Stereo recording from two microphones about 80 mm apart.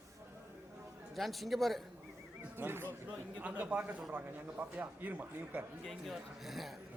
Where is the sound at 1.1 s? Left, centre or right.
Centre.